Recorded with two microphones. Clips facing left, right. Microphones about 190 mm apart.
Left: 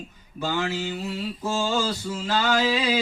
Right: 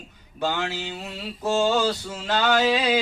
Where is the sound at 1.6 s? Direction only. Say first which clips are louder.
Right 3 dB; 65° right (ahead or behind).